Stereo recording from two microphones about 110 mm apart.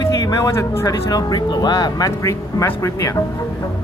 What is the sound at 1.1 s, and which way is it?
Speech, 40° left (ahead or behind).